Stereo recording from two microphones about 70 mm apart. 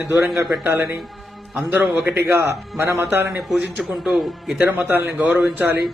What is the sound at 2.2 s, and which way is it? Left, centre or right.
A man's voice, right.